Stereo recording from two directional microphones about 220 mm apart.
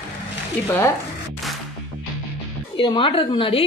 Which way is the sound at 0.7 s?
10° left (ahead or behind).